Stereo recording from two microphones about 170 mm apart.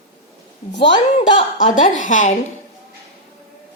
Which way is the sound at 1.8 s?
50° left (ahead or behind).